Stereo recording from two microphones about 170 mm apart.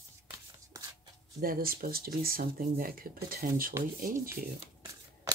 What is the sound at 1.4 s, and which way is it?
Speech, 60° right (ahead or behind).